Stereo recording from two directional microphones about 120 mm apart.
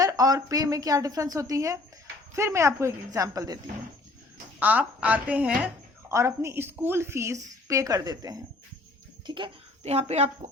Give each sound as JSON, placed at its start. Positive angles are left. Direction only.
{"t": 0.0, "sound": "a woman's voice", "side_deg": -30}
{"t": 4.6, "sound": "a woman's voice", "side_deg": -10}
{"t": 6.1, "sound": "a woman's voice", "side_deg": -25}
{"t": 9.8, "sound": "a woman's voice", "side_deg": -60}